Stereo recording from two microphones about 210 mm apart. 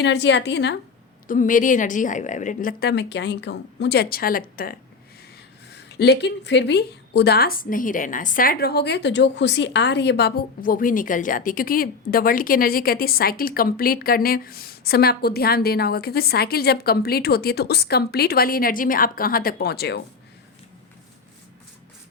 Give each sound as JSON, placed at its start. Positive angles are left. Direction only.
{"t": 0.0, "sound": "a woman's voice", "side_deg": 55}
{"t": 1.3, "sound": "a woman's voice", "side_deg": 40}